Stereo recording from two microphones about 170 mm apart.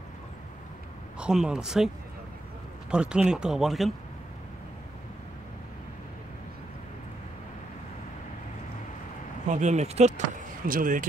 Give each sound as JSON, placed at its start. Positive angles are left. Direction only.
{"t": 1.2, "sound": "speech", "side_deg": -5}
{"t": 2.9, "sound": "speech", "side_deg": -5}
{"t": 9.5, "sound": "speech", "side_deg": -45}